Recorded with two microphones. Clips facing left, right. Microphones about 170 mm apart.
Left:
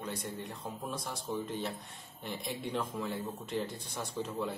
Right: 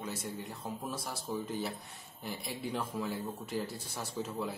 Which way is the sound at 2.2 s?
5° right (ahead or behind).